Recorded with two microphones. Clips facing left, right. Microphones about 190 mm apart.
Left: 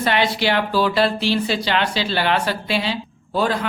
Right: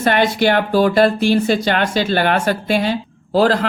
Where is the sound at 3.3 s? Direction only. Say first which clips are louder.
Right 6 dB; 90° right.